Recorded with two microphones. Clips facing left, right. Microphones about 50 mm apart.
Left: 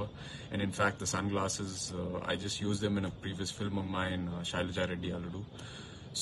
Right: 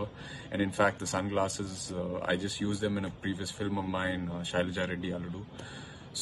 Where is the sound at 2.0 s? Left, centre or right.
Centre.